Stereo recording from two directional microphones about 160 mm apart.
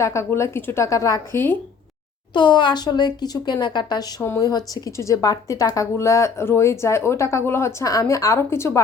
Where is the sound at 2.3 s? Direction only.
30° left (ahead or behind).